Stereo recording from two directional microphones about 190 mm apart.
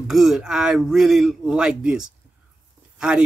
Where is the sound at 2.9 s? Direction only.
5° right (ahead or behind).